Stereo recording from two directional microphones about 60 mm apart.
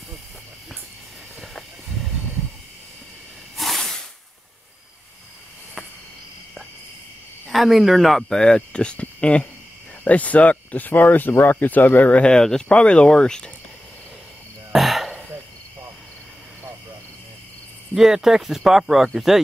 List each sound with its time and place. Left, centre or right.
1.4 s a sound: centre
3.5 s snake: centre
7.4 s speech: centre
8.4 s speech: centre; by 12.2 s left
12.2 s speech: centre
14.7 s a sound: centre
17.9 s speech: centre